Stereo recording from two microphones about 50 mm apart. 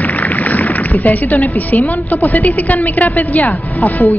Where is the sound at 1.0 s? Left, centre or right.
Left.